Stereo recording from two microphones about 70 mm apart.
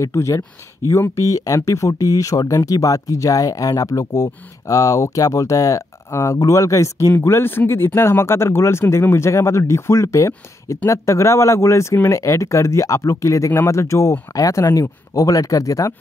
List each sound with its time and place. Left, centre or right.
0.0 s speech: left